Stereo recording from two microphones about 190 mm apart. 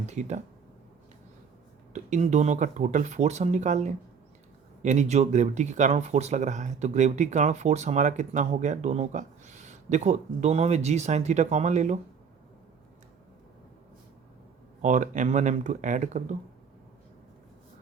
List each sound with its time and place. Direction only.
0.0 s a sound: 40° right (ahead or behind)
1.9 s speech: 40° right (ahead or behind)
14.8 s speech: 40° right (ahead or behind)